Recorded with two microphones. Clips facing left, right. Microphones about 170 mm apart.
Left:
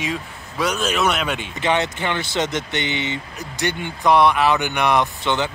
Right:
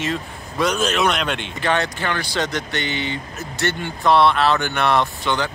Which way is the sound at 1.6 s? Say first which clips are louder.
Left 1 dB; 20° left (ahead or behind).